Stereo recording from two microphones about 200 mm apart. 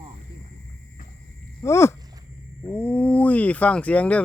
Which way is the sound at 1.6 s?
15° left (ahead or behind).